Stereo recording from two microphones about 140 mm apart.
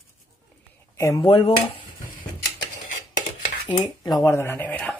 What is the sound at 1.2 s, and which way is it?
Speech, 35° left (ahead or behind).